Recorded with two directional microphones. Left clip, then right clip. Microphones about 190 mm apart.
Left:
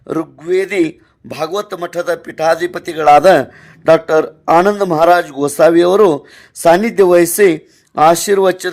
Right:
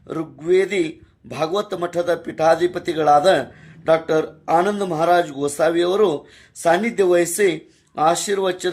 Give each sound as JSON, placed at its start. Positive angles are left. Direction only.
{"t": 0.1, "sound": "a man's voice", "side_deg": 45}